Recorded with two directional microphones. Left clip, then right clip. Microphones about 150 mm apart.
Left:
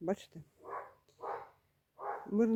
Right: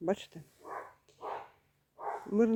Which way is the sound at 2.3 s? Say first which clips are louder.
Right 3 dB; 5° left (ahead or behind).